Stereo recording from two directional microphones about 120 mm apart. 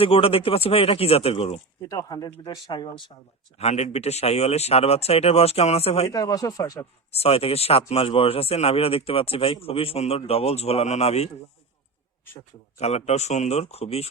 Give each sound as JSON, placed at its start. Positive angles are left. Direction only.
{"t": 0.0, "sound": "speech", "side_deg": 50}
{"t": 1.9, "sound": "speech", "side_deg": 30}
{"t": 3.6, "sound": "speech", "side_deg": 65}
{"t": 6.1, "sound": "speech", "side_deg": 30}
{"t": 7.1, "sound": "speech", "side_deg": 55}
{"t": 12.8, "sound": "speech", "side_deg": 65}